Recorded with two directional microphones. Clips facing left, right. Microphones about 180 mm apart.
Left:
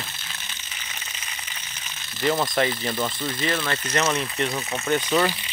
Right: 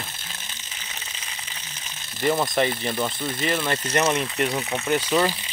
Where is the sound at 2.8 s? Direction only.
5° right (ahead or behind).